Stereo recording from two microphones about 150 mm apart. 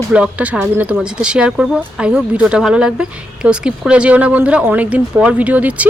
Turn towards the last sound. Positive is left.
turn(degrees=-10)  # may be behind; listen again after turning